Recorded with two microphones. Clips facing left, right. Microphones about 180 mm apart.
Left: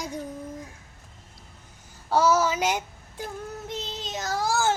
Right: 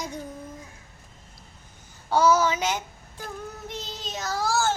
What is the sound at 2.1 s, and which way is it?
Child singing, 5° left (ahead or behind).